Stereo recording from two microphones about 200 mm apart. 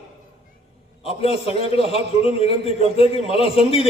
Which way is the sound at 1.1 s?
30° left (ahead or behind).